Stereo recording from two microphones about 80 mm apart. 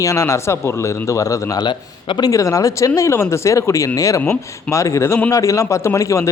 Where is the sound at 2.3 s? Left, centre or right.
Left.